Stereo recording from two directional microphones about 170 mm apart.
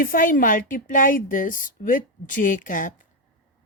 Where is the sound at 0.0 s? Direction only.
55° left (ahead or behind).